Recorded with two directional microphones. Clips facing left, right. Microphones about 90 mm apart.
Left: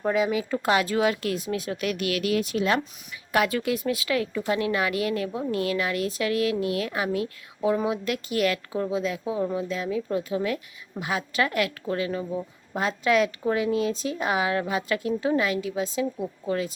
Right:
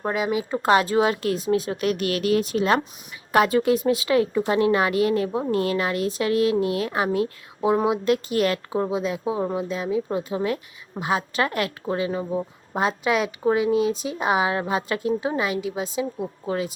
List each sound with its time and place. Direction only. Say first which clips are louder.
0.1 s a woman's voice: left 1 dB; 15° right (ahead or behind)
0.5 s a woman's voice: right 7 dB; 35° right (ahead or behind); by 16.7 s 10° right (ahead or behind)